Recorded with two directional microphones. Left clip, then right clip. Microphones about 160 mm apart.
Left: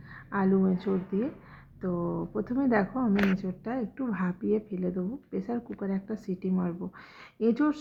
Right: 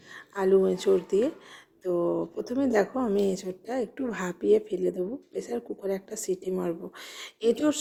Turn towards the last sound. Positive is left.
turn(degrees=-30)  # may be behind; listen again after turning